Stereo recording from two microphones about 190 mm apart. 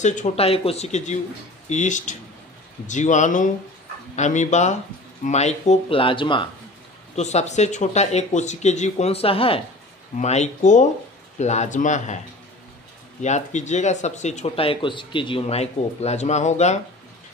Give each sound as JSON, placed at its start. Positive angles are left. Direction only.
{"t": 0.0, "sound": "speech", "side_deg": 40}
{"t": 7.2, "sound": "speech", "side_deg": 35}
{"t": 13.2, "sound": "speech", "side_deg": 40}